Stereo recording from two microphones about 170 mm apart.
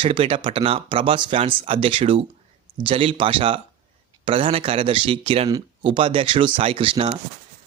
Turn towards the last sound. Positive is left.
turn(degrees=-35)  # may be behind; listen again after turning